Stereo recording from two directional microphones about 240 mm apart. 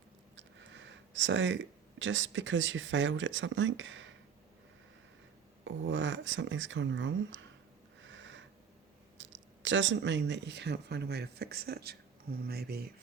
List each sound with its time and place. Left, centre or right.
0.3 s speech: right
5.6 s speech: right
8.0 s a sound: right
9.1 s speech: right